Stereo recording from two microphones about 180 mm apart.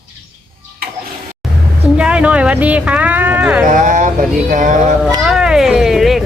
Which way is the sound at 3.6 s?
45° right (ahead or behind).